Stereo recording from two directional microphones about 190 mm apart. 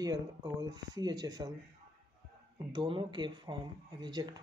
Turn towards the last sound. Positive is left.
turn(degrees=-20)  # may be behind; listen again after turning